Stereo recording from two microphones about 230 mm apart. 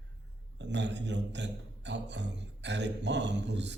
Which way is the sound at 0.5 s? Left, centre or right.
Right.